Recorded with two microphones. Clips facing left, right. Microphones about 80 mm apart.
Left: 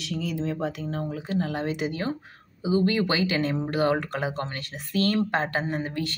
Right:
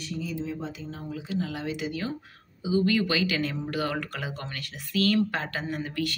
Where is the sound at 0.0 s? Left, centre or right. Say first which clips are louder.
Left 4 dB; left.